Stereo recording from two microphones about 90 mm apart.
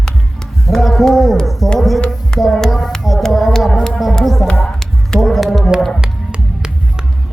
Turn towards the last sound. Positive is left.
turn(degrees=-10)  # may be behind; listen again after turning